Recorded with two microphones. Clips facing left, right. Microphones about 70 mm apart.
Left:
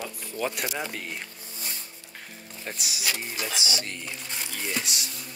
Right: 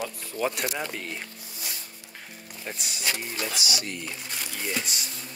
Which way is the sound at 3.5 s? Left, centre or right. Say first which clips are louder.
Even; left.